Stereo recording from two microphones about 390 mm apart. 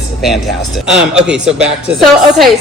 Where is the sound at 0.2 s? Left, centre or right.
Centre.